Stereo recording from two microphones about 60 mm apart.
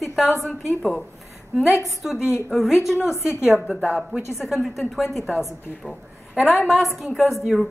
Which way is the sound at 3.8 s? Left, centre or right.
Right.